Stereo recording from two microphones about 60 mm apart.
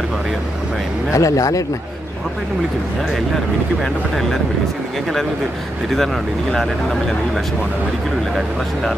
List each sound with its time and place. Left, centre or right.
1.1 s speech: left
6.5 s speech: centre